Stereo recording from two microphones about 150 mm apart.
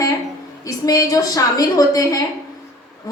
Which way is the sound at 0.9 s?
25° left (ahead or behind).